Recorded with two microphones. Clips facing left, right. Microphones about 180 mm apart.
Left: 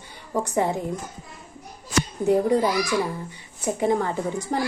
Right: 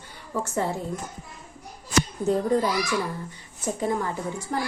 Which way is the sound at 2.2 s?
15° left (ahead or behind).